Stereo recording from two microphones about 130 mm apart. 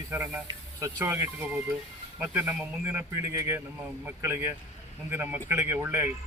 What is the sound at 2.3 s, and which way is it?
Speech, 15° right (ahead or behind).